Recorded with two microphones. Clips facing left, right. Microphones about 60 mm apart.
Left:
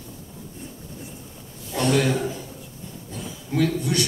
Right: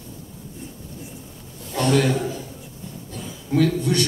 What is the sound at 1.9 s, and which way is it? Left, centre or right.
Speech, centre.